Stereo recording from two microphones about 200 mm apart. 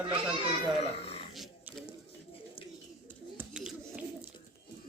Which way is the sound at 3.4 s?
5° right (ahead or behind).